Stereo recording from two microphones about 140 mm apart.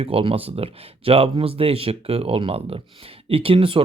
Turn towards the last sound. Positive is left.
turn(degrees=-40)  # may be behind; listen again after turning